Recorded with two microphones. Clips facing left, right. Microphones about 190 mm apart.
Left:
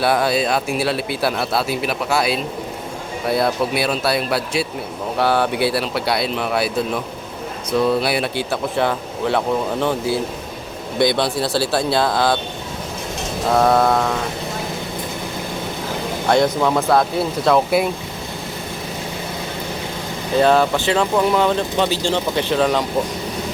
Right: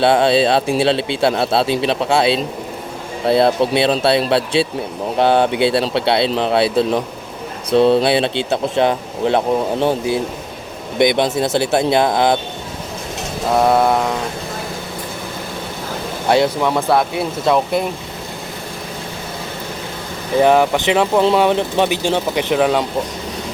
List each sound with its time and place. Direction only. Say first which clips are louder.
0.0 s speech: right 5 dB; 25° right (ahead or behind)
10.9 s speech: right 3 dB; 20° right (ahead or behind)
13.8 s speech: right 1 dB; 15° right (ahead or behind)
16.3 s speech: right 1 dB; 10° right (ahead or behind)
17.4 s speech: even; centre (ahead or behind)
20.4 s speech: right 2 dB; 15° right (ahead or behind)